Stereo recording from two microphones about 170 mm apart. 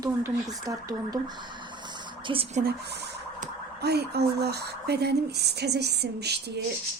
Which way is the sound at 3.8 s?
75° right (ahead or behind).